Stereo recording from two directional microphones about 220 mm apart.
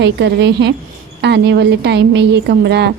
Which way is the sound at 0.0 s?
50° right (ahead or behind).